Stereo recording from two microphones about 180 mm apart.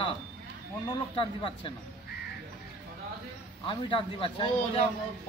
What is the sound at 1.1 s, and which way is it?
Speech, 30° left (ahead or behind).